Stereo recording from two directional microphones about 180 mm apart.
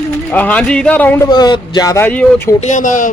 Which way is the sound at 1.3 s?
25° left (ahead or behind).